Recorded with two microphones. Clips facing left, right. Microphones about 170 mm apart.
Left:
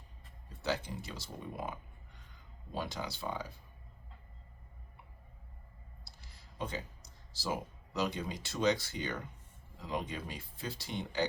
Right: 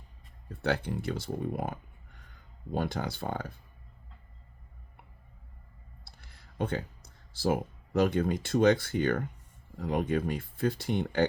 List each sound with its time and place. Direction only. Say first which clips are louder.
0.6 s speech: right 6 dB; 60° right (ahead or behind)
6.1 s speech: right 2 dB; 60° right (ahead or behind)